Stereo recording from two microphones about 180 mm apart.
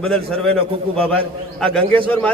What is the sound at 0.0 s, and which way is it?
A man's voice, 5° left (ahead or behind).